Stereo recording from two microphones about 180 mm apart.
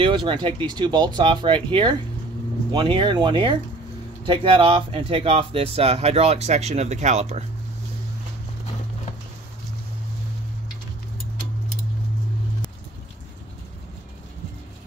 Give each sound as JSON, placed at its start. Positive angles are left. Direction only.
{"t": 0.0, "sound": "speech", "side_deg": -25}